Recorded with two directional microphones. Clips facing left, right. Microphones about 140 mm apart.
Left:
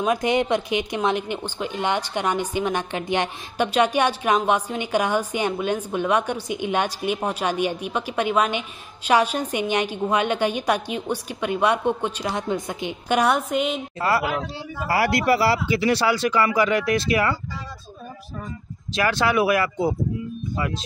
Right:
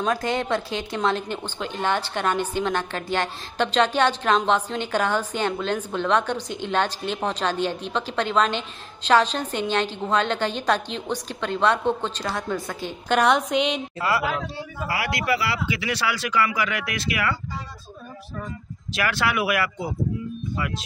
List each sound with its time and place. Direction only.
0.0 s a woman's voice: 20° left (ahead or behind)
14.9 s speech: 40° left (ahead or behind)
18.9 s speech: 25° left (ahead or behind)